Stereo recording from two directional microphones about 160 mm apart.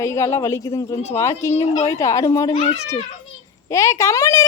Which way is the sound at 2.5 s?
40° left (ahead or behind).